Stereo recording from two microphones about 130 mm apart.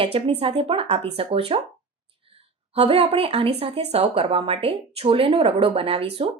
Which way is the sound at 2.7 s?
50° right (ahead or behind).